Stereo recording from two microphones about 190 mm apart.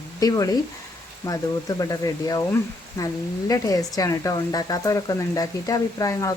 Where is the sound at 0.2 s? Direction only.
20° left (ahead or behind).